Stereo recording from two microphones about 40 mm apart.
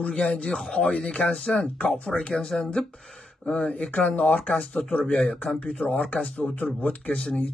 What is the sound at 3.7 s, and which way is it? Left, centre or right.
Speech, left.